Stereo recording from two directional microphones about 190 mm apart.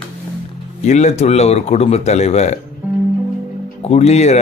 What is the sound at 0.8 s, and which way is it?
Speech, 35° left (ahead or behind).